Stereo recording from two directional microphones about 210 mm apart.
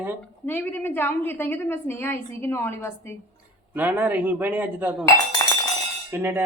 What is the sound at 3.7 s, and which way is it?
A man's voice, 10° right (ahead or behind).